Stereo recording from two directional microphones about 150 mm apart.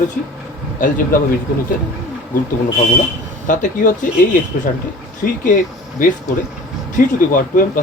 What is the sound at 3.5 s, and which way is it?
Speech, 60° left (ahead or behind).